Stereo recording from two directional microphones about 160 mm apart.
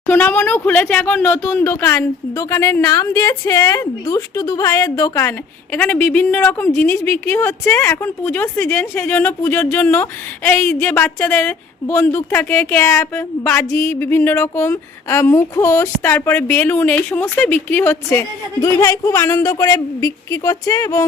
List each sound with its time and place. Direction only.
0.1 s speech: 10° left (ahead or behind)
5.7 s a woman's voice: 10° left (ahead or behind)